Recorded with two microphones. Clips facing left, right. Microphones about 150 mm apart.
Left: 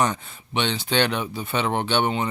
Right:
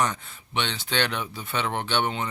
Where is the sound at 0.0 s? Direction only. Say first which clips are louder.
Left 3 dB; 20° left (ahead or behind).